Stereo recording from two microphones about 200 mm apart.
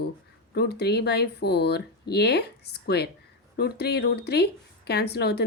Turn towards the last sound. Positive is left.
turn(degrees=55)  # may be behind; listen again after turning